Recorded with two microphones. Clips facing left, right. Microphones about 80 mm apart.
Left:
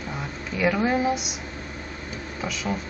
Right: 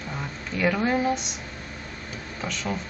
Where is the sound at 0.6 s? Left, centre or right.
Centre.